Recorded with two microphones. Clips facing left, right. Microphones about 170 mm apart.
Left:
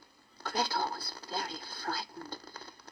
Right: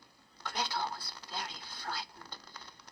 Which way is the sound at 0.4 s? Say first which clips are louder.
Left 4 dB; 35° left (ahead or behind).